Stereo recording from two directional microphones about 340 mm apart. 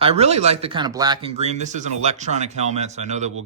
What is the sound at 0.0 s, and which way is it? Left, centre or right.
A man's voice, centre.